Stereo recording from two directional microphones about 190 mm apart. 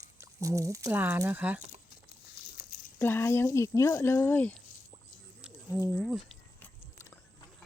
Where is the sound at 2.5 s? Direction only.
45° left (ahead or behind).